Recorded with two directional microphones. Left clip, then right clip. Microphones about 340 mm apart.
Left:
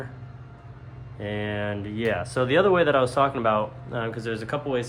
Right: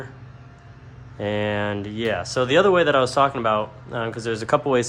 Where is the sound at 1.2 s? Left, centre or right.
Centre.